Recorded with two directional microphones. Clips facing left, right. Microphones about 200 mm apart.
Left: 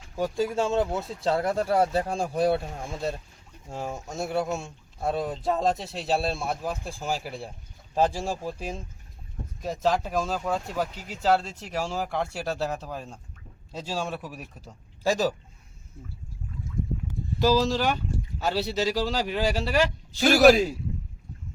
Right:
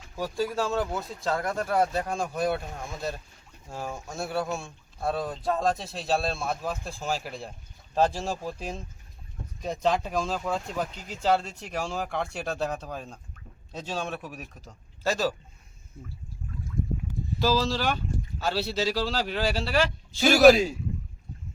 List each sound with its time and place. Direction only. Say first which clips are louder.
0.2 s speech: left 3 dB; 20° left (ahead or behind)
17.4 s speech: left 3 dB; 15° left (ahead or behind)
20.1 s speech: even; centre (ahead or behind)